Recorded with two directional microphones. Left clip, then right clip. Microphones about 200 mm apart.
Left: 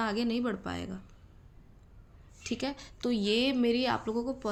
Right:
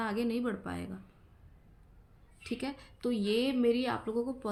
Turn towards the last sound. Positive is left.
turn(degrees=40)  # may be behind; listen again after turning